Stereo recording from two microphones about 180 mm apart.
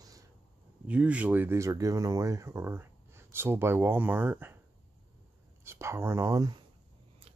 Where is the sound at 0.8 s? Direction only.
5° right (ahead or behind).